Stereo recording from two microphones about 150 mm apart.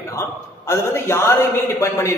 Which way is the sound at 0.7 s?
15° left (ahead or behind).